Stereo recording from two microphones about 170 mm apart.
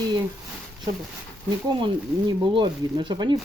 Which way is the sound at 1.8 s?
30° right (ahead or behind).